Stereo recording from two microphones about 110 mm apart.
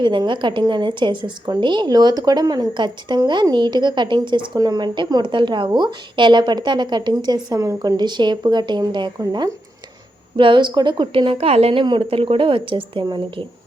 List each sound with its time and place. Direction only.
0.0 s speech: 45° right (ahead or behind)